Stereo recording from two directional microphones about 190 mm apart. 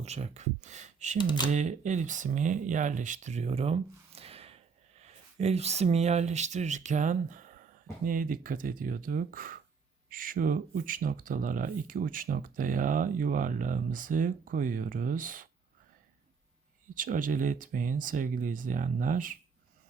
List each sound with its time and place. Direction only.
0.0 s speech: 35° right (ahead or behind)
16.9 s speech: 45° right (ahead or behind)